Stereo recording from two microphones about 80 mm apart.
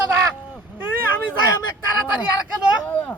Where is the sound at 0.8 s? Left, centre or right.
Right.